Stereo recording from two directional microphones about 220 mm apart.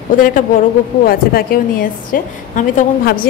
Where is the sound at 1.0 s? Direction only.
40° left (ahead or behind).